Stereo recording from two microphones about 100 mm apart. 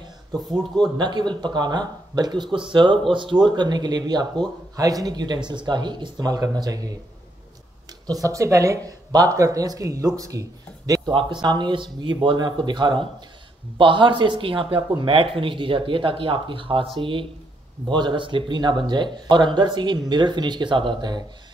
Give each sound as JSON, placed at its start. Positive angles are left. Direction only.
{"t": 0.3, "sound": "speech", "side_deg": 0}
{"t": 0.9, "sound": "speech", "side_deg": -50}
{"t": 8.1, "sound": "speech", "side_deg": -35}
{"t": 10.9, "sound": "a sound", "side_deg": -40}
{"t": 11.4, "sound": "speech", "side_deg": -50}